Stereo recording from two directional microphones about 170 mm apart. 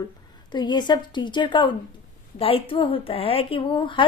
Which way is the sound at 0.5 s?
25° left (ahead or behind).